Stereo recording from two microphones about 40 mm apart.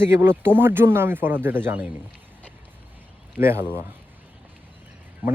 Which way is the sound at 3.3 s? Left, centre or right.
Right.